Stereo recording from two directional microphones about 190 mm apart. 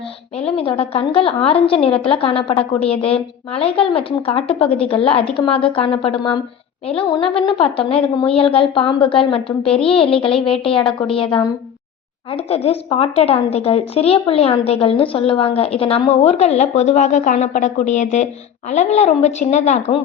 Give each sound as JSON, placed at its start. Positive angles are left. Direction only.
{"t": 0.3, "sound": "a woman's voice", "side_deg": 30}